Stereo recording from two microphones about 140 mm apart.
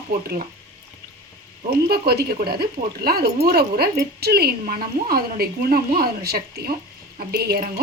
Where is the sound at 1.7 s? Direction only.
90° right.